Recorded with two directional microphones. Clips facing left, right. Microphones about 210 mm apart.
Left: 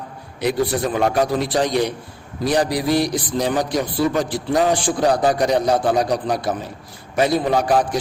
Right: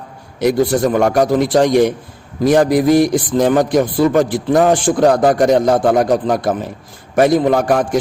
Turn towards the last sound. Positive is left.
turn(degrees=-50)  # may be behind; listen again after turning